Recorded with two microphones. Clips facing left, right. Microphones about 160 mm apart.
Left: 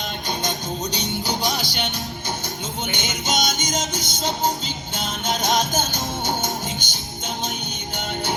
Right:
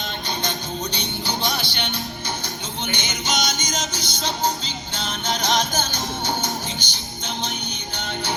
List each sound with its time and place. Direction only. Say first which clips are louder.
0.4 s music: left 1 dB; 40° left (ahead or behind)
2.9 s music: left 1 dB; 50° left (ahead or behind)
4.2 s music: left 1 dB; 20° left (ahead or behind)
5.2 s music: left 1 dB; 50° left (ahead or behind)